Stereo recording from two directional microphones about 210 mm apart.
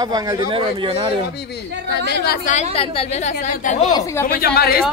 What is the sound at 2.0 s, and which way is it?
A woman's voice, 50° left (ahead or behind).